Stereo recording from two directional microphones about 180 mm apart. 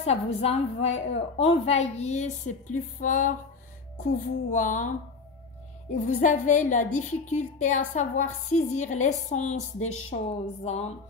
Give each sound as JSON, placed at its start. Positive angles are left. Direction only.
{"t": 0.0, "sound": "a woman's voice", "side_deg": 35}
{"t": 6.0, "sound": "a woman's voice", "side_deg": 45}